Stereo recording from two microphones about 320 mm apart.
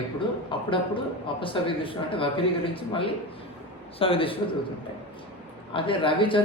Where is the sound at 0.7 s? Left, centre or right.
Centre.